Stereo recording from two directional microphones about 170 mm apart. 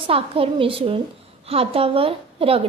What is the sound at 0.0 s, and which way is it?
A woman's voice, 30° right (ahead or behind).